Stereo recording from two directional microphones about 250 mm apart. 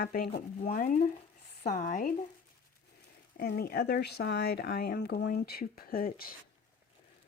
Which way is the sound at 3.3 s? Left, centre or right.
Left.